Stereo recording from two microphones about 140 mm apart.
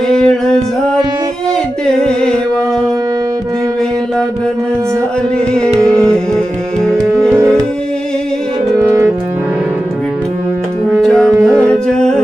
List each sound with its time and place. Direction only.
0.1 s music: 5° left (ahead or behind)
1.9 s singing: 5° left (ahead or behind)
5.8 s music: 5° left (ahead or behind)
8.8 s music: 15° right (ahead or behind)
11.0 s music: centre (ahead or behind)